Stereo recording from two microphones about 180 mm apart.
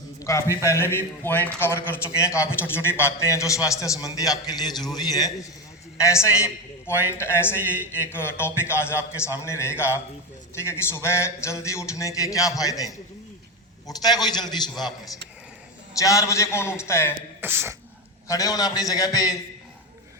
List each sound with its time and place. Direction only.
0.2 s a man's voice: 15° left (ahead or behind)
14.0 s a man's voice: 20° left (ahead or behind)
17.4 s speech: 15° right (ahead or behind)
18.3 s a man's voice: 20° left (ahead or behind)